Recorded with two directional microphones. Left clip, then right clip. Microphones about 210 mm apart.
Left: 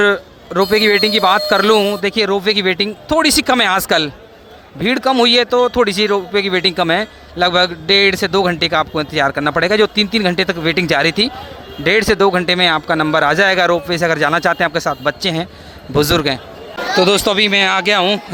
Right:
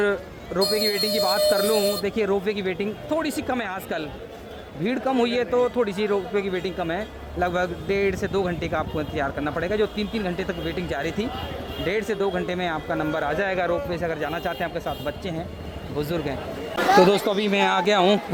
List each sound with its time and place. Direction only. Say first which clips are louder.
0.0 s a man's voice: left 10 dB; 15° left (ahead or behind)